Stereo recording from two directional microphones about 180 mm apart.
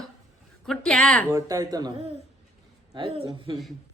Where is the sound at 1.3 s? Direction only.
20° right (ahead or behind).